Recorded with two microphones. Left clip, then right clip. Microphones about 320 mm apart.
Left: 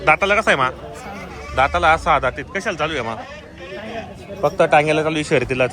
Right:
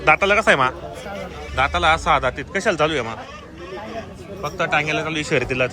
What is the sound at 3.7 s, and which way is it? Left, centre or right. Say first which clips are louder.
Vehicle: left 2 dB; left.